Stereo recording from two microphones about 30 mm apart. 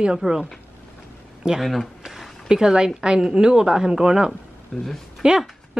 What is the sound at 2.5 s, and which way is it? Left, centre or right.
A woman's voice, right.